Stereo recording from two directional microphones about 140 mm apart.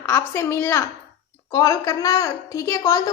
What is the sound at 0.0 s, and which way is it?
A woman's voice, 20° left (ahead or behind).